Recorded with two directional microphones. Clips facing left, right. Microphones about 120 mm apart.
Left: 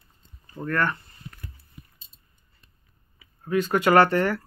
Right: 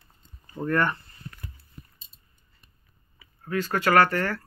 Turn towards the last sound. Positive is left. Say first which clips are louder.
# left 3 dB
turn(degrees=20)  # may be behind; listen again after turning